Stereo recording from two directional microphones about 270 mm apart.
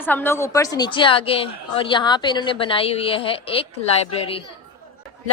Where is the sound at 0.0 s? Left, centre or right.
Centre.